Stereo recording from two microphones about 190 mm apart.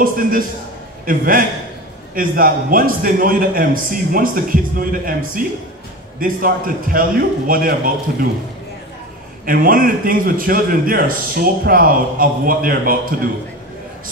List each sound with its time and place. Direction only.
0.0 s a man's voice: 45° right (ahead or behind)
9.5 s a man's voice: 50° right (ahead or behind)